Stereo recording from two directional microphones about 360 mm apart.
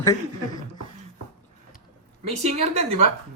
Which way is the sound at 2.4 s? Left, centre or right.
Centre.